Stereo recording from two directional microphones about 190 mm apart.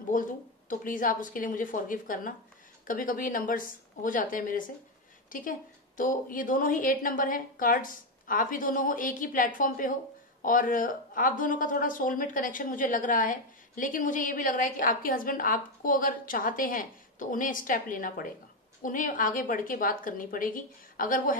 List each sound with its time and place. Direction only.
0.1 s speech: 45° left (ahead or behind)